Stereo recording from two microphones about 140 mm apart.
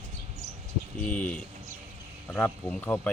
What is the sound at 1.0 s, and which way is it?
Speech, 10° left (ahead or behind).